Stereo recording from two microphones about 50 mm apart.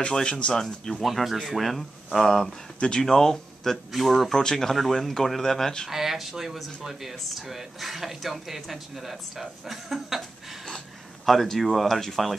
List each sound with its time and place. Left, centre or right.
0.0 s speech: centre
0.9 s speech: centre
5.9 s speech: centre
11.2 s speech: centre